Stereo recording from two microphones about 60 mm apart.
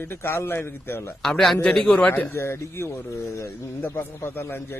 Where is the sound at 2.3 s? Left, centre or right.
Left.